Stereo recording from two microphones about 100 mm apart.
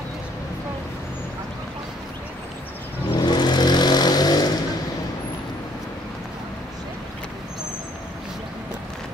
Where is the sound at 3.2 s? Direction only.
45° left (ahead or behind).